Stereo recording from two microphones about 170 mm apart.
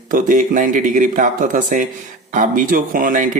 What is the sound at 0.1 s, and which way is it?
Speech, 50° right (ahead or behind).